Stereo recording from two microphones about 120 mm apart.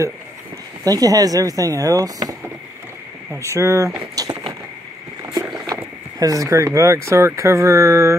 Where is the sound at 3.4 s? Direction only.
25° right (ahead or behind).